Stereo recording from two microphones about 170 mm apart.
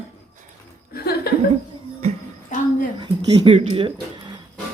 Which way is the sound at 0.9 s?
70° left (ahead or behind).